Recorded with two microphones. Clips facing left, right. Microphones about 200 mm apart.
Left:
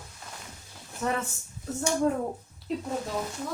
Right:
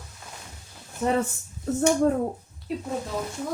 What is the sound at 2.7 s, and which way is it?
Speech, 5° right (ahead or behind).